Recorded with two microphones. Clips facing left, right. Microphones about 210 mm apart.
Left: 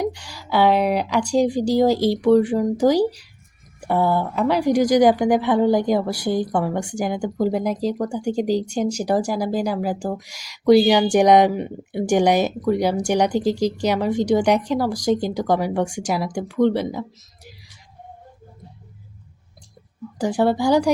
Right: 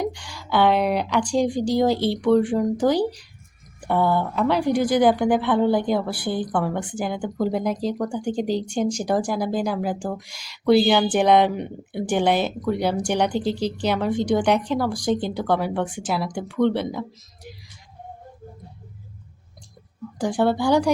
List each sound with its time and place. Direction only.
0.0 s speech: 10° left (ahead or behind)
6.1 s a woman's voice: 40° left (ahead or behind)
6.3 s speech: 10° left (ahead or behind)
20.1 s speech: 10° left (ahead or behind)